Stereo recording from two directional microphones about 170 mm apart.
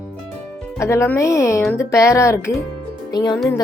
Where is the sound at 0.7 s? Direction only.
15° left (ahead or behind).